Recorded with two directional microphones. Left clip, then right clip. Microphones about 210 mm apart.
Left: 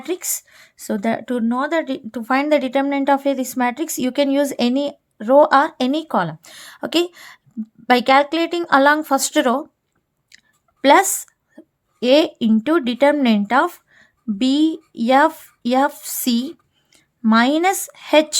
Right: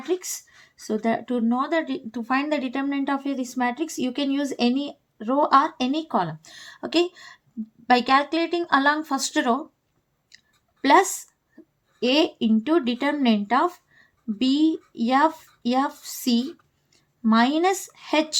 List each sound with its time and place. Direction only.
0.0 s speech: 45° left (ahead or behind)